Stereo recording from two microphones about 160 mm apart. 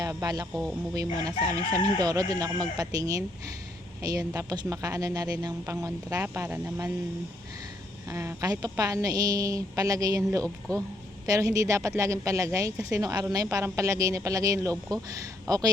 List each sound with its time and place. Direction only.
0.0 s speech: 20° right (ahead or behind)
8.1 s speech: 15° right (ahead or behind)